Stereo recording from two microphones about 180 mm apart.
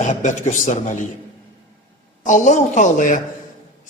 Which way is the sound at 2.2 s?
45° left (ahead or behind).